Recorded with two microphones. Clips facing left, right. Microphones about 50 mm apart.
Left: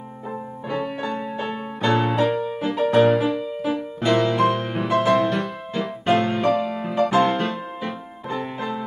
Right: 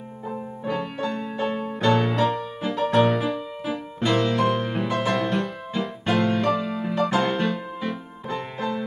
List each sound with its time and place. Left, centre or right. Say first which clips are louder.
0.7 s music: left 1 dB; centre
3.0 s music: left 4 dB; centre
6.8 s music: left 4 dB; centre